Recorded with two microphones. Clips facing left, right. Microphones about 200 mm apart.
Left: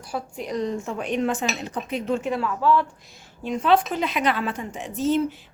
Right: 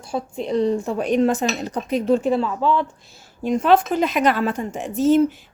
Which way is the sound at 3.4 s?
45° right (ahead or behind).